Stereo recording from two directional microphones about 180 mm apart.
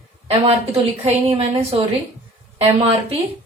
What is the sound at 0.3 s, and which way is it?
Speech, 35° right (ahead or behind).